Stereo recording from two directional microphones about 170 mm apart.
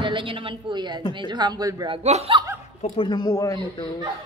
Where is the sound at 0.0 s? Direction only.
30° right (ahead or behind).